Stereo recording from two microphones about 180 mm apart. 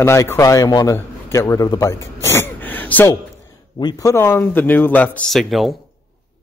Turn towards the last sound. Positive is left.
turn(degrees=0)  # may be behind; listen again after turning